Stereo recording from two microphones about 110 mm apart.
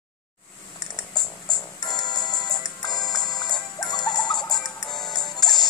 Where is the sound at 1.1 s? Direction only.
40° left (ahead or behind).